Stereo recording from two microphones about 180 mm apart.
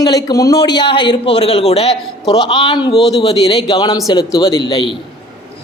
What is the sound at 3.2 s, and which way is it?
A man's voice, 30° left (ahead or behind).